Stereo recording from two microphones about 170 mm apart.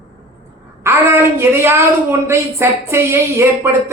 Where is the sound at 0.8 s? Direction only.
15° right (ahead or behind).